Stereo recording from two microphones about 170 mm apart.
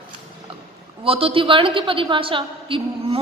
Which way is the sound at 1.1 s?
35° right (ahead or behind).